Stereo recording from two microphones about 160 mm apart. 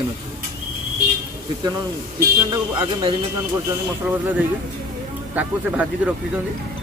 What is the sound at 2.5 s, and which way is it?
Speech, 30° right (ahead or behind).